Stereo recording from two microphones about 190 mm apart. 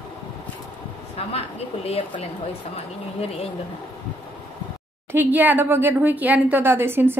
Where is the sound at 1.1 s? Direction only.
30° left (ahead or behind).